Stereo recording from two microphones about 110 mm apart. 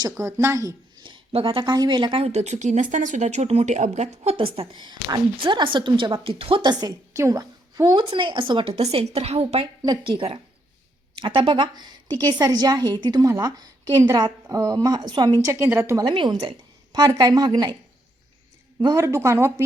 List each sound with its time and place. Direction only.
0.2 s speech: 25° right (ahead or behind)
1.3 s a woman's voice: 55° right (ahead or behind)
2.2 s speech: 90° right; by 4.8 s 60° right (ahead or behind)
4.8 s a woman's voice: 40° right (ahead or behind)
8.7 s a woman's voice: 70° right (ahead or behind)
11.2 s a woman's voice: 50° right (ahead or behind); by 16.0 s 20° right (ahead or behind)
16.0 s a woman's voice: 45° right (ahead or behind)
18.9 s speech: 25° right (ahead or behind)